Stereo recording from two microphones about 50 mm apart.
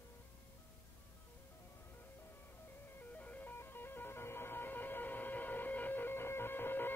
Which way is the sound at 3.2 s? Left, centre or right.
Left.